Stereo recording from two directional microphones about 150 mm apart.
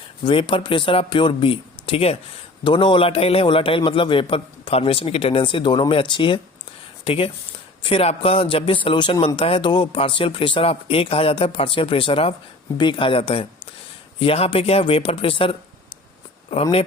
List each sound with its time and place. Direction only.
0.3 s a man's voice: 35° left (ahead or behind)